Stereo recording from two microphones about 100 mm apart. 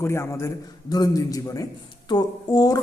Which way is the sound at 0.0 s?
25° left (ahead or behind).